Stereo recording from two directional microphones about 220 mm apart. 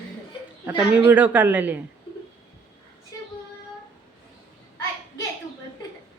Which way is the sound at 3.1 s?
15° left (ahead or behind).